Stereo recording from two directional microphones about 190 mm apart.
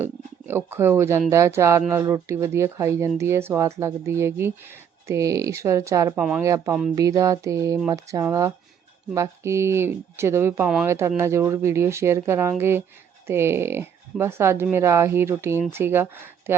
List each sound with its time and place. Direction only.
0.0 s a sound: 10° right (ahead or behind)
1.3 s speech: 15° right (ahead or behind)
6.1 s speech: 5° right (ahead or behind)
6.4 s speech: 15° right (ahead or behind)